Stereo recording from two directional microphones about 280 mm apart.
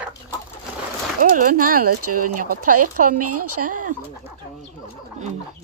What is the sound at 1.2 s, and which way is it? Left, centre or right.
Speech, right.